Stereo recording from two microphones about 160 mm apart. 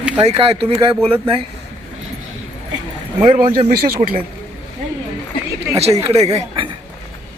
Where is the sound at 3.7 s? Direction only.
70° right (ahead or behind).